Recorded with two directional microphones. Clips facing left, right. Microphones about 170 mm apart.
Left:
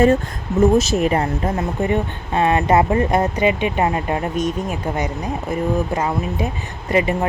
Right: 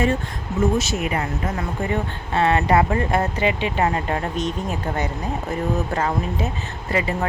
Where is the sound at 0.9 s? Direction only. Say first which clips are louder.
Left 6 dB; 35° left (ahead or behind).